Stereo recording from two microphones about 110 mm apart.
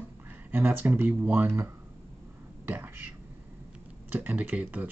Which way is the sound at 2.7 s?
20° right (ahead or behind).